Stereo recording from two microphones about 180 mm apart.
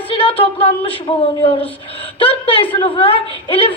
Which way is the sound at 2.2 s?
30° left (ahead or behind).